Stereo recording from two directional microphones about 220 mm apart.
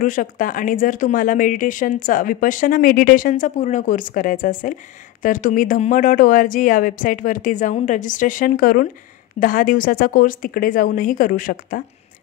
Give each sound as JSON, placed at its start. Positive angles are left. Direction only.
{"t": 0.0, "sound": "speech", "side_deg": 35}